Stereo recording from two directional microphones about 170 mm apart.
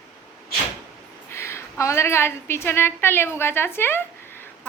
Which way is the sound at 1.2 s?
15° left (ahead or behind).